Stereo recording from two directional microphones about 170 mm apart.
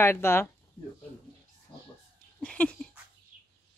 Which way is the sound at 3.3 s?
50° right (ahead or behind).